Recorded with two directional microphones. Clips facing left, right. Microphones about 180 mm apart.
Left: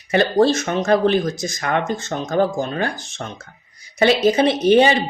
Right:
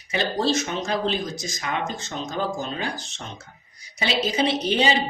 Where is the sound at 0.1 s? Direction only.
55° left (ahead or behind).